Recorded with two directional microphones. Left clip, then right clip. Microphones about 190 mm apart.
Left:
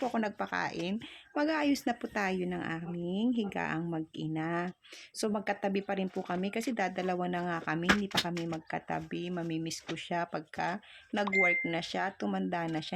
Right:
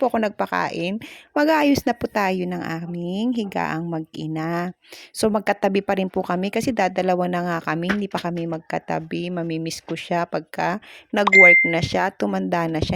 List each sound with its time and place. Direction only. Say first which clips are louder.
0.0 s speech: right 13 dB; 50° right (ahead or behind)